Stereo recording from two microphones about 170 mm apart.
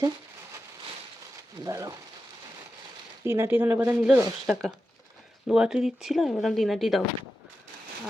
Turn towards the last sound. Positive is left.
turn(degrees=0)  # may be behind; listen again after turning